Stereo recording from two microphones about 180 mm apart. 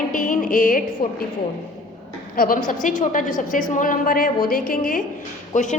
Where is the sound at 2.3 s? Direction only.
50° left (ahead or behind).